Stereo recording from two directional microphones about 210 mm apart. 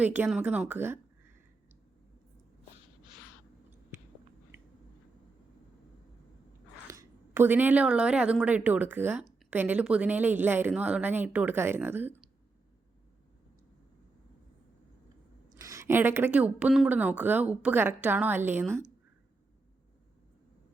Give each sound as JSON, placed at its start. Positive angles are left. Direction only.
{"t": 0.0, "sound": "a woman's voice", "side_deg": -5}
{"t": 6.8, "sound": "a woman's voice", "side_deg": -15}
{"t": 15.5, "sound": "a woman's voice", "side_deg": -15}